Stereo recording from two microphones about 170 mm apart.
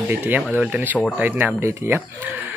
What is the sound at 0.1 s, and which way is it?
Speech, 10° right (ahead or behind).